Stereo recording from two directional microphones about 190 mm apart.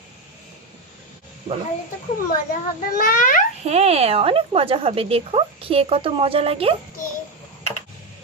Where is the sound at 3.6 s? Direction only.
35° right (ahead or behind).